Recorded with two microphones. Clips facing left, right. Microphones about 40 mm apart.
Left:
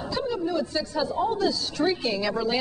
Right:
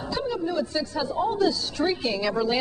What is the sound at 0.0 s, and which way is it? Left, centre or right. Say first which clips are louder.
A woman's voice: even; centre.